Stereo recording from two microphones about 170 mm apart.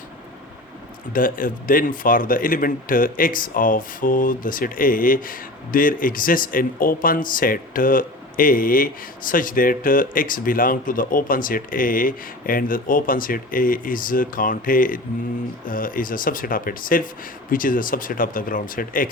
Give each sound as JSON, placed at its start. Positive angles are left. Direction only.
{"t": 1.1, "sound": "speech", "side_deg": 55}